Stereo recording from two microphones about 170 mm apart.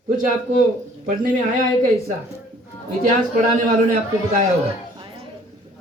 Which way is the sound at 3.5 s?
55° right (ahead or behind).